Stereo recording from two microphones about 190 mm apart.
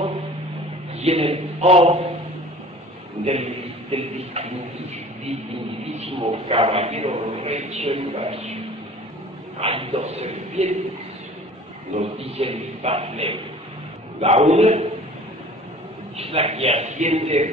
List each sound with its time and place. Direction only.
0.0 s a sound: 30° right (ahead or behind)
0.9 s a man's voice: 30° right (ahead or behind)
3.3 s a man's voice: 35° right (ahead or behind)
5.9 s a man's voice: 30° right (ahead or behind)
9.6 s a man's voice: 30° right (ahead or behind)
11.9 s a man's voice: 30° right (ahead or behind)
16.2 s a man's voice: 30° right (ahead or behind)